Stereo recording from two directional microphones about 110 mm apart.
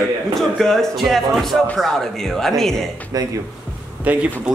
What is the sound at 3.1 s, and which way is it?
Speech, 35° right (ahead or behind).